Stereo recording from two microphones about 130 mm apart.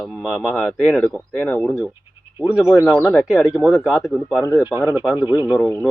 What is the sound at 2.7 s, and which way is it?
Speech, 20° left (ahead or behind).